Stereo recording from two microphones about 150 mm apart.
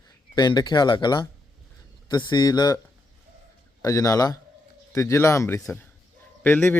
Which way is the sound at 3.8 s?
25° left (ahead or behind).